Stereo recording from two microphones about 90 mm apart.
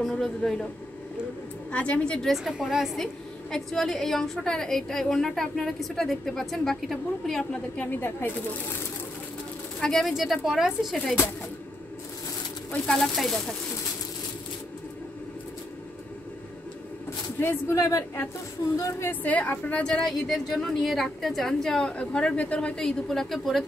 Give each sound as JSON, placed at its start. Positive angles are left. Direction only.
{"t": 0.0, "sound": "a woman's voice", "side_deg": 5}
{"t": 1.7, "sound": "a woman's voice", "side_deg": 15}
{"t": 2.3, "sound": "a woman's voice", "side_deg": -5}
{"t": 7.8, "sound": "a woman's voice", "side_deg": 20}
{"t": 9.8, "sound": "a woman's voice", "side_deg": 5}
{"t": 12.7, "sound": "a woman's voice", "side_deg": 10}
{"t": 17.4, "sound": "a woman's voice", "side_deg": 30}
{"t": 19.0, "sound": "a woman's voice", "side_deg": 20}